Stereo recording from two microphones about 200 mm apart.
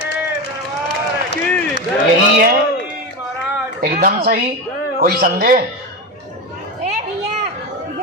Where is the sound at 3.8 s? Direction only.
50° right (ahead or behind).